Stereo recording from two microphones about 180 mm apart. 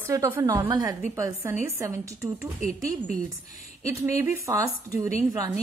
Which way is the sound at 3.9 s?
15° right (ahead or behind).